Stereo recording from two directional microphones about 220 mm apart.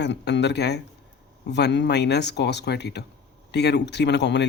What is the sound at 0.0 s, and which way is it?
A man's voice, 50° left (ahead or behind).